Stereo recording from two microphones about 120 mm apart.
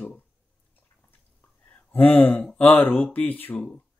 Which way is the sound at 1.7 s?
15° left (ahead or behind).